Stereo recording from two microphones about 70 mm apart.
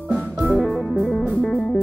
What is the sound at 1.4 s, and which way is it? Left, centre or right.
Music, centre.